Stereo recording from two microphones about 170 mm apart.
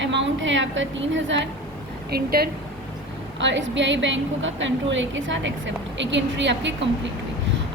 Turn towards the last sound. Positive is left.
turn(degrees=-90)